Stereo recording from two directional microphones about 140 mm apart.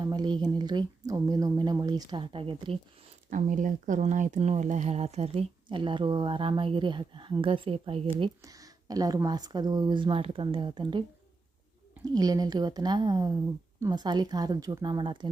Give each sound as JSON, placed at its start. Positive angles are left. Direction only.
{"t": 0.0, "sound": "speech", "side_deg": -30}
{"t": 3.2, "sound": "speech", "side_deg": -70}
{"t": 8.4, "sound": "speech", "side_deg": -25}
{"t": 12.1, "sound": "speech", "side_deg": -25}